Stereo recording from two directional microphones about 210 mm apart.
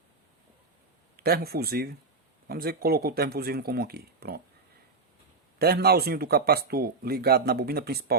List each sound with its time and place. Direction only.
1.1 s speech: 45° right (ahead or behind)
5.5 s speech: 50° right (ahead or behind)